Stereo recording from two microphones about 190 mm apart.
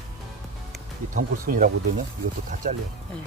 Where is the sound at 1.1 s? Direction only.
45° right (ahead or behind).